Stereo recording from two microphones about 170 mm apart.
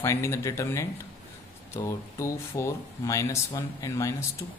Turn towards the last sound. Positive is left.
turn(degrees=20)  # may be behind; listen again after turning